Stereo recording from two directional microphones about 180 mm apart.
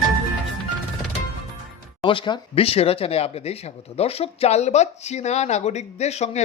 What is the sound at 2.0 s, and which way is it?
Speech, 30° left (ahead or behind).